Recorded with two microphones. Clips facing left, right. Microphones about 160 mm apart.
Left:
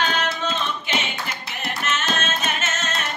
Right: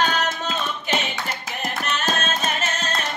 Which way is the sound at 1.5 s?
40° right (ahead or behind).